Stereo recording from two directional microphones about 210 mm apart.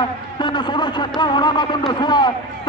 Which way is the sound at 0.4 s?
20° left (ahead or behind).